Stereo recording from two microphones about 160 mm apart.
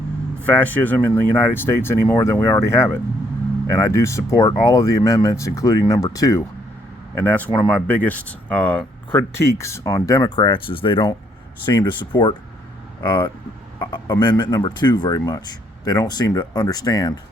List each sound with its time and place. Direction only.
0.4 s speech: 10° left (ahead or behind)
7.2 s speech: 10° left (ahead or behind)